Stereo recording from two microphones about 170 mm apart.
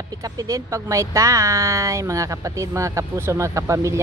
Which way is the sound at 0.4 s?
20° right (ahead or behind).